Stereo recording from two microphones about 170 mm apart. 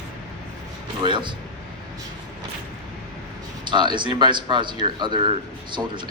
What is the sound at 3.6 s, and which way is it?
Speech, 25° right (ahead or behind).